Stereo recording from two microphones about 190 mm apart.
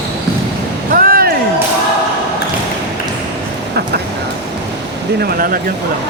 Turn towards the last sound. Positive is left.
turn(degrees=-50)  # may be behind; listen again after turning